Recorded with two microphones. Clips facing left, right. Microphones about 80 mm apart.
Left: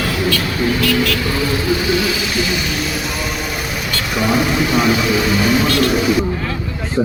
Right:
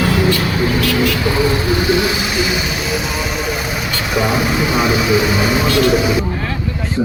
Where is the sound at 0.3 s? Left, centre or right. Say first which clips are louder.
Right 2 dB; right.